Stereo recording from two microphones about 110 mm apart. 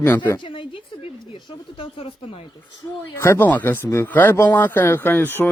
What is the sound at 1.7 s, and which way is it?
Speech, 55° left (ahead or behind).